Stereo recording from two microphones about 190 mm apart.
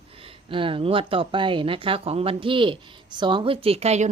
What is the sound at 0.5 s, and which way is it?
Speech, 25° right (ahead or behind).